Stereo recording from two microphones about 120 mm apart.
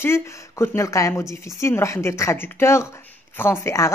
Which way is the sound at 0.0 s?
20° left (ahead or behind).